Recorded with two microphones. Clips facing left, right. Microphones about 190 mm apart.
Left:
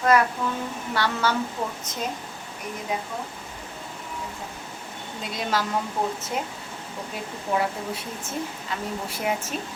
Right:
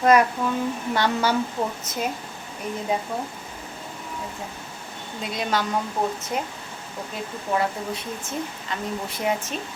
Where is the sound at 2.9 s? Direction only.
30° right (ahead or behind).